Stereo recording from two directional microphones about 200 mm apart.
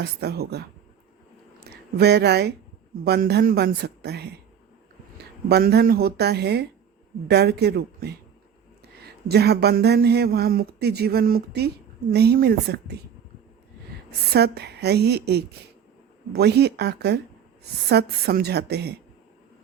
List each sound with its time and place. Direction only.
0.0 s speech: 55° right (ahead or behind)
1.7 s speech: 55° right (ahead or behind)
14.3 s a woman's voice: 55° right (ahead or behind)